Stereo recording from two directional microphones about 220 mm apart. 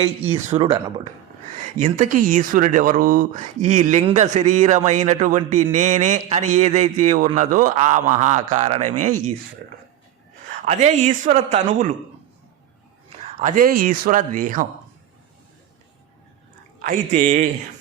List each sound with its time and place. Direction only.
0.3 s speech: 30° right (ahead or behind)
0.7 s speech: 20° right (ahead or behind)
1.5 s speech: 35° right (ahead or behind)
10.7 s speech: 35° right (ahead or behind)
13.2 s speech: 35° right (ahead or behind)
16.8 s speech: 35° right (ahead or behind)